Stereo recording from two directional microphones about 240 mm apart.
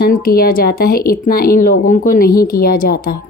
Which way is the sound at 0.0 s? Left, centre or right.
Left.